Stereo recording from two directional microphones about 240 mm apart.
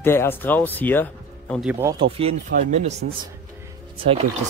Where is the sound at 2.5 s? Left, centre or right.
Right.